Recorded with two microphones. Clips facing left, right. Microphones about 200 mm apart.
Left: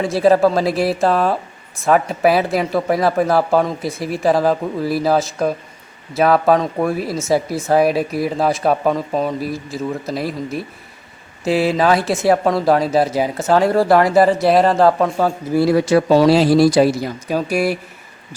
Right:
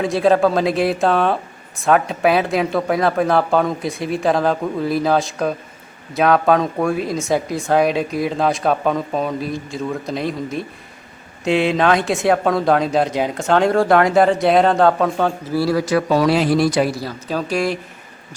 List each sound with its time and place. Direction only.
0.0 s speech: centre (ahead or behind)
15.5 s speech: 20° left (ahead or behind)
16.9 s speech: 20° left (ahead or behind)